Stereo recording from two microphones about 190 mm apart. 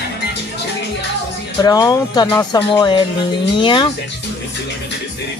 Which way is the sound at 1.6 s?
20° left (ahead or behind).